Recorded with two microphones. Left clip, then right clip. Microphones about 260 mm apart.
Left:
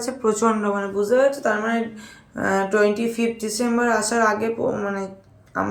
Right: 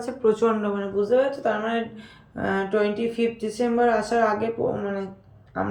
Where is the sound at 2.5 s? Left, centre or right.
Left.